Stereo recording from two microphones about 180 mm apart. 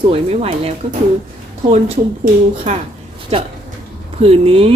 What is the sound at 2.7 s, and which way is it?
A woman's voice, 40° right (ahead or behind).